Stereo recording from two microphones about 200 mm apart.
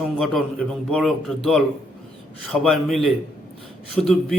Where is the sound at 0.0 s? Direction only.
Centre (ahead or behind).